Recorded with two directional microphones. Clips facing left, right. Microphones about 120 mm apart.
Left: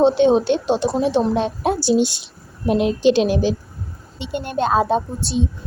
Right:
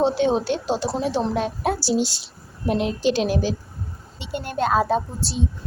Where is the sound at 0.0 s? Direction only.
20° left (ahead or behind).